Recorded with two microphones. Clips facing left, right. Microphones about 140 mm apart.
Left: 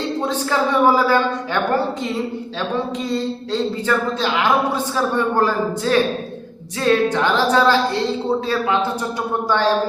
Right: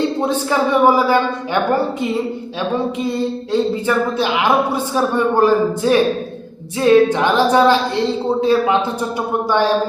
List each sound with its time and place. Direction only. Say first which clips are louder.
0.2 s a woman's voice: right 3 dB; 15° right (ahead or behind)
3.0 s a woman's voice: right 3 dB; 15° right (ahead or behind)